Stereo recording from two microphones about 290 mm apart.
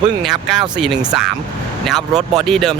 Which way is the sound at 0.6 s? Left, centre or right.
Centre.